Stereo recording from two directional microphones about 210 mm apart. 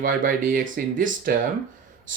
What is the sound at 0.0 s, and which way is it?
Speech, 40° right (ahead or behind).